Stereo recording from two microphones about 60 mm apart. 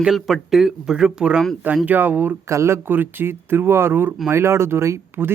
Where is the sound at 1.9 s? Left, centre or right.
Right.